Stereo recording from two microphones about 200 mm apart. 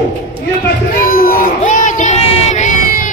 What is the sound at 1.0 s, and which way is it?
Child singing, 45° left (ahead or behind).